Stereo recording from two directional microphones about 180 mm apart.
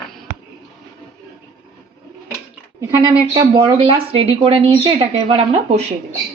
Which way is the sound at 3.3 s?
25° right (ahead or behind).